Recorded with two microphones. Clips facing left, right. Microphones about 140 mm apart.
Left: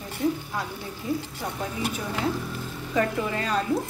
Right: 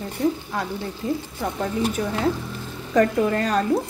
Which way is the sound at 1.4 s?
55° right (ahead or behind).